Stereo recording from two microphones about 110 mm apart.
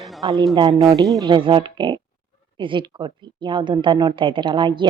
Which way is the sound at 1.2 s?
45° right (ahead or behind).